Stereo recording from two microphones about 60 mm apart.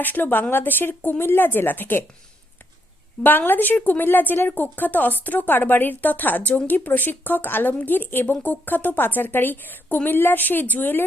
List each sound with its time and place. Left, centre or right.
0.0 s speech: left
3.2 s speech: left